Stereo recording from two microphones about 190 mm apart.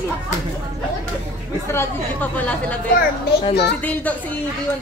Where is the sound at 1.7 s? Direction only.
10° left (ahead or behind).